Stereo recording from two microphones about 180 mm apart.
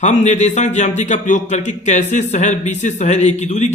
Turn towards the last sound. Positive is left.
turn(degrees=40)  # may be behind; listen again after turning